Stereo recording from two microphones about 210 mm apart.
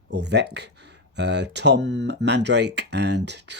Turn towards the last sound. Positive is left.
turn(degrees=-55)  # may be behind; listen again after turning